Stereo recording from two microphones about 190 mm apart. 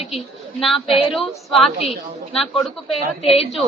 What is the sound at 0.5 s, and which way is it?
Speech, centre (ahead or behind).